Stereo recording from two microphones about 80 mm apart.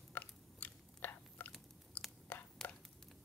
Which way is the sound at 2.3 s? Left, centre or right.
Centre.